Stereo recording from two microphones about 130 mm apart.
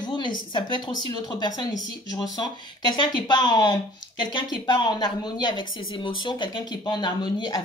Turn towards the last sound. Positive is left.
turn(degrees=35)  # may be behind; listen again after turning